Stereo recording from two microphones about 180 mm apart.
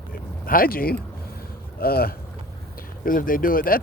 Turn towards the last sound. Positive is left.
turn(degrees=50)  # may be behind; listen again after turning